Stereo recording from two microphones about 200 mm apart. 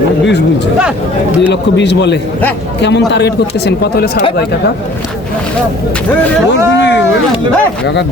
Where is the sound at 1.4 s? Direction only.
60° left (ahead or behind).